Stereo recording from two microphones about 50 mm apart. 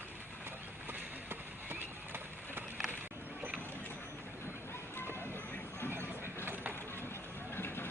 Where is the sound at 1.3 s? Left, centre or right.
Right.